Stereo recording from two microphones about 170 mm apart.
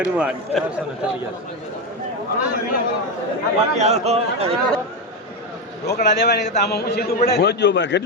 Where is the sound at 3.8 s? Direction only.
40° right (ahead or behind).